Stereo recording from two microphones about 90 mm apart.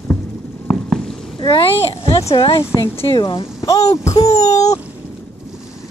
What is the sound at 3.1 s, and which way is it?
Speech, 55° left (ahead or behind).